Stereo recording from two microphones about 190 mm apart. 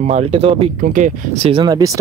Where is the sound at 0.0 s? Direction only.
35° right (ahead or behind).